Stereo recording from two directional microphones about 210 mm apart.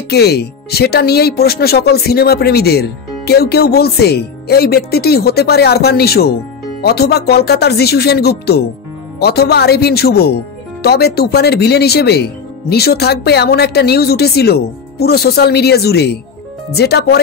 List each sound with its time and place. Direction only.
0.1 s speech: 50° left (ahead or behind)